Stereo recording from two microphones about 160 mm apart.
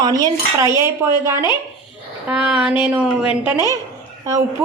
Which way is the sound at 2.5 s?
5° right (ahead or behind).